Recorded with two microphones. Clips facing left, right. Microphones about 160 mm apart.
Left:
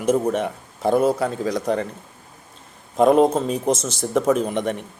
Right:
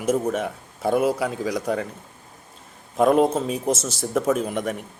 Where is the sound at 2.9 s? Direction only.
5° right (ahead or behind).